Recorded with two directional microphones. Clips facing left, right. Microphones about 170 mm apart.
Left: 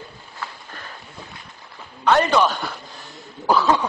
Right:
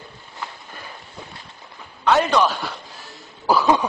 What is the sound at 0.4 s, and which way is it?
Walk, 10° right (ahead or behind).